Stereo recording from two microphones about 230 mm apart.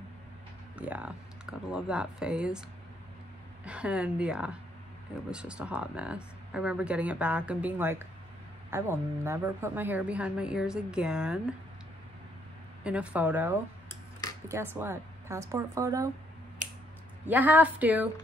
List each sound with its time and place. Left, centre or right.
0.7 s speech: centre
3.6 s speech: centre
12.8 s speech: centre
14.8 s speech: centre
16.6 s a sound: right
17.3 s speech: centre